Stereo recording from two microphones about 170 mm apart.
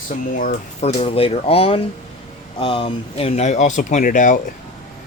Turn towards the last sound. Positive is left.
turn(degrees=50)  # may be behind; listen again after turning